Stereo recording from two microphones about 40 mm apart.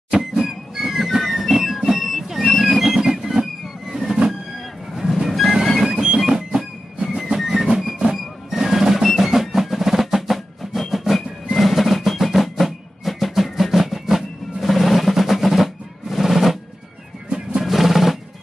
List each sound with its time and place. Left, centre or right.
0.4 s music: centre
3.0 s train: centre
5.3 s music: centre
5.9 s music: centre
7.0 s music: right
7.2 s music: centre
17.6 s drum roll: centre